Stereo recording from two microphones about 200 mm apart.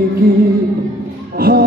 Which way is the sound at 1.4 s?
50° right (ahead or behind).